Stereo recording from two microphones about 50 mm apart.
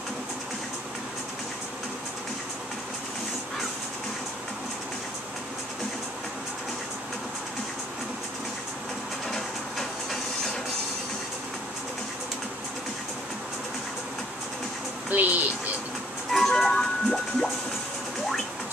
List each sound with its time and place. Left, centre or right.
15.0 s music: right
16.3 s music: centre